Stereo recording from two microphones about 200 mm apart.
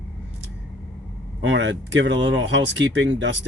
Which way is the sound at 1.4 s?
70° right (ahead or behind).